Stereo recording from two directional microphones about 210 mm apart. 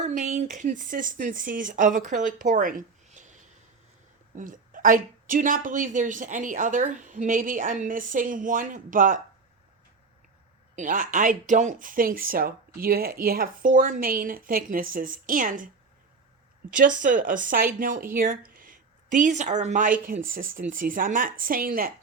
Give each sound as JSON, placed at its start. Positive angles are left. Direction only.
{"t": 0.0, "sound": "speech", "side_deg": -35}
{"t": 4.4, "sound": "speech", "side_deg": -40}
{"t": 10.8, "sound": "speech", "side_deg": -40}
{"t": 16.7, "sound": "speech", "side_deg": -40}